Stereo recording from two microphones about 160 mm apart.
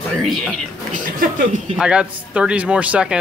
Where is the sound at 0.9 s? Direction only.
55° right (ahead or behind).